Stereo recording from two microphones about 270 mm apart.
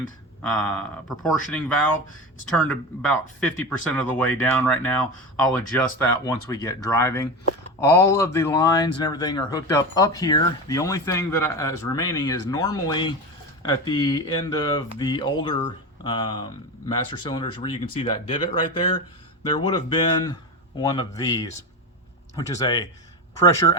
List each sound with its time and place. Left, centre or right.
0.4 s a man's voice: centre
19.5 s speech: centre